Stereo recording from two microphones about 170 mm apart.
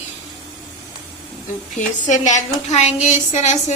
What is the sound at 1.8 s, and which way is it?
A woman's voice, 45° left (ahead or behind).